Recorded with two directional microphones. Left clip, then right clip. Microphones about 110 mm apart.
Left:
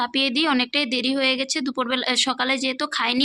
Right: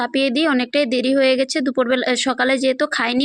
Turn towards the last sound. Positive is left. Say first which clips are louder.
# right 4 dB
turn(degrees=-45)  # may be behind; listen again after turning